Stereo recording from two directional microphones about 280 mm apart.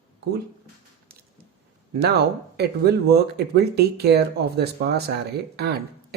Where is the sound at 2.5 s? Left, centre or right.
Right.